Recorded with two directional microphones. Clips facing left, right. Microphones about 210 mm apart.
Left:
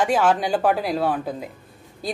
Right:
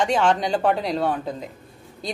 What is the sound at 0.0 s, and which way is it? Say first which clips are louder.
A woman's voice: left 1 dB; 5° left (ahead or behind).